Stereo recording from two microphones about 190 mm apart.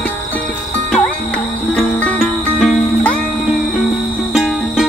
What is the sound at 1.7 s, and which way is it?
Music, centre (ahead or behind).